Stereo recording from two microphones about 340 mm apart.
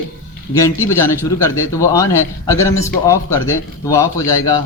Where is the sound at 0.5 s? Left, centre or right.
Centre.